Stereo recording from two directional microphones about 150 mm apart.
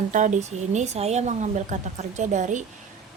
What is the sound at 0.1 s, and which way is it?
A woman's voice, 55° right (ahead or behind).